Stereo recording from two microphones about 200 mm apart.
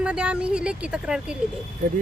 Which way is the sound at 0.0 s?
5° right (ahead or behind).